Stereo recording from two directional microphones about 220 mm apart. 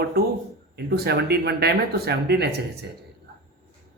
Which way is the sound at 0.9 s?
45° right (ahead or behind).